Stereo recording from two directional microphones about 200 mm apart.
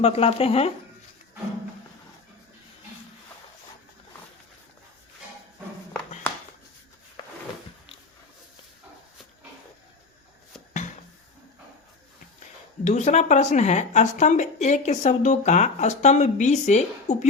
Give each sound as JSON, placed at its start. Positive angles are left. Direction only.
{"t": 0.0, "sound": "speech", "side_deg": 30}
{"t": 6.3, "sound": "a sound", "side_deg": 10}
{"t": 12.8, "sound": "speech", "side_deg": 35}